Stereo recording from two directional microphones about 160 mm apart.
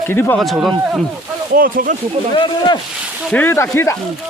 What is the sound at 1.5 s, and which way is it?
Speech, 65° right (ahead or behind).